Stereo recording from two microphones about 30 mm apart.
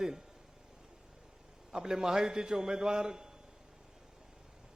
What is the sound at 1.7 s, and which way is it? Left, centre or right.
A man's voice, centre.